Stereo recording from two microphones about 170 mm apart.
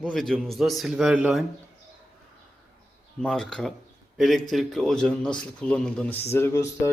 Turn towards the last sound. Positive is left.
turn(degrees=15)  # may be behind; listen again after turning